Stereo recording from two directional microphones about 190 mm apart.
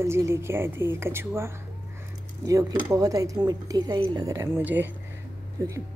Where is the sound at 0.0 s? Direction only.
15° right (ahead or behind).